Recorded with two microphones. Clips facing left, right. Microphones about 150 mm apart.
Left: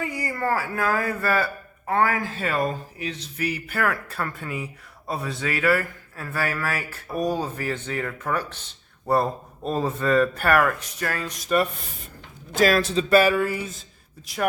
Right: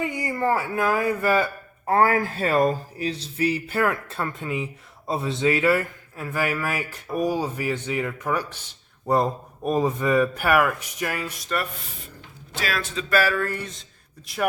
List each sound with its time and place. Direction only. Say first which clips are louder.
0.0 s speech: right 2 dB; 20° right (ahead or behind)
1.9 s a man's voice: right 3 dB; 35° right (ahead or behind); by 11.3 s 10° right (ahead or behind)
12.5 s speech: left 9 dB; 40° left (ahead or behind); by 14.4 s centre (ahead or behind)